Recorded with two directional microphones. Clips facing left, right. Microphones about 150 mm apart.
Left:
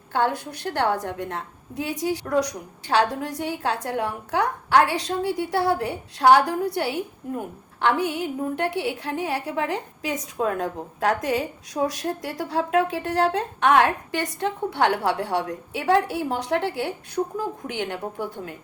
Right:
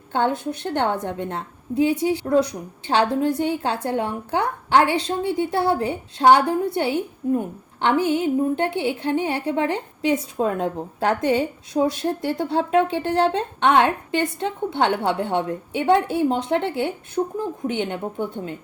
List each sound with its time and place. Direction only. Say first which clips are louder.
0.1 s a woman's voice: right 2 dB; 25° right (ahead or behind)
17.2 s speech: right 2 dB; 40° right (ahead or behind)
17.7 s a woman's voice: right 4 dB; 25° right (ahead or behind)